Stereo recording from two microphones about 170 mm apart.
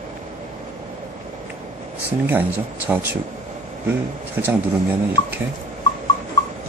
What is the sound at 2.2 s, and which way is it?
Speech, 10° right (ahead or behind).